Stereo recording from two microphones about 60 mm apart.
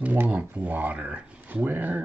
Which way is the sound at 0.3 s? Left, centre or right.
Right.